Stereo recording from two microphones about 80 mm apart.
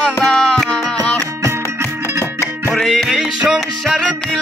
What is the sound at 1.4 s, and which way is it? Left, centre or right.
Music, right.